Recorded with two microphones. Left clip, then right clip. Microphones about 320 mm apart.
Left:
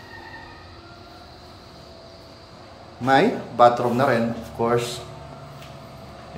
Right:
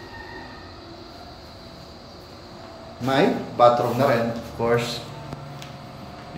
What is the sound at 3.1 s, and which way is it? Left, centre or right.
Speech, centre.